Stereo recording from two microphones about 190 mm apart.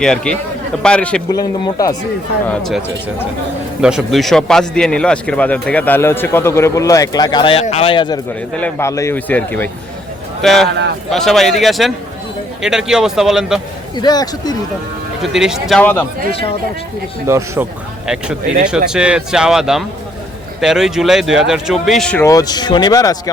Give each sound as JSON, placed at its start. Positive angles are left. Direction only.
{"t": 0.0, "sound": "speech", "side_deg": 5}
{"t": 1.3, "sound": "speech", "side_deg": 20}
{"t": 2.5, "sound": "a man's voice", "side_deg": 0}
{"t": 8.5, "sound": "a man's voice", "side_deg": 10}
{"t": 10.7, "sound": "a man's voice", "side_deg": -65}
{"t": 11.1, "sound": "speech", "side_deg": 0}
{"t": 13.9, "sound": "speech", "side_deg": 20}
{"t": 15.2, "sound": "speech", "side_deg": -5}
{"t": 15.8, "sound": "a man's voice", "side_deg": 10}
{"t": 17.2, "sound": "speech", "side_deg": -15}
{"t": 18.0, "sound": "speech", "side_deg": -5}
{"t": 22.2, "sound": "a man's voice", "side_deg": 15}